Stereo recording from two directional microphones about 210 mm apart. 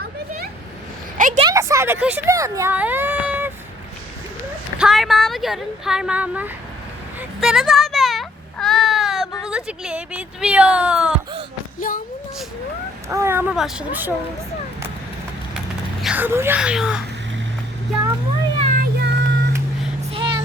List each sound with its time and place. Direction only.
1.4 s speech: 15° right (ahead or behind)
4.8 s speech: centre (ahead or behind)
7.2 s a sound: centre (ahead or behind)
9.5 s speech: 5° right (ahead or behind)
11.8 s a sound: 40° left (ahead or behind)
13.1 s speech: 10° right (ahead or behind)
15.5 s a sound: 5° right (ahead or behind)
18.6 s child singing: 40° right (ahead or behind)
20.0 s vehicle: 25° right (ahead or behind)